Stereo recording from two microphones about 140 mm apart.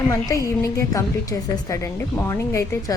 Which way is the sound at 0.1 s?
25° left (ahead or behind).